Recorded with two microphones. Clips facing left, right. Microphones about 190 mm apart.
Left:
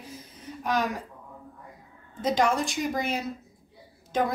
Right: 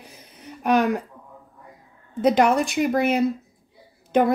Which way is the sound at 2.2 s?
65° right (ahead or behind).